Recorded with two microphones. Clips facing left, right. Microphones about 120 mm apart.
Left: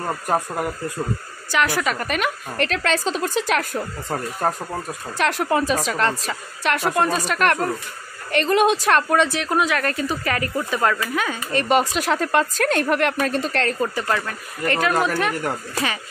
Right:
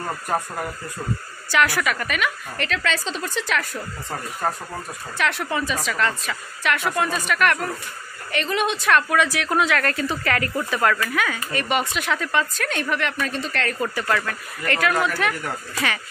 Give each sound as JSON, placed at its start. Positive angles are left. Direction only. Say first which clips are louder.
{"t": 0.0, "sound": "a woman's voice", "louder": "left 3 dB", "side_deg": 25}
{"t": 1.5, "sound": "a woman's voice", "louder": "even", "side_deg": 20}
{"t": 5.4, "sound": "a woman's voice", "louder": "left 5 dB", "side_deg": 45}
{"t": 11.7, "sound": "a woman's voice", "louder": "left 5 dB", "side_deg": 35}
{"t": 13.7, "sound": "a woman's voice", "louder": "left 1 dB", "side_deg": 20}